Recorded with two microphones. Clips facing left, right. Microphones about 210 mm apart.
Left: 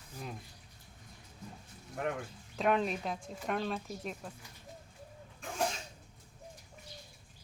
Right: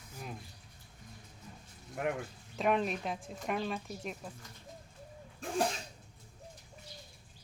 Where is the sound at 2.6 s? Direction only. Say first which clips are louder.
Even; centre (ahead or behind).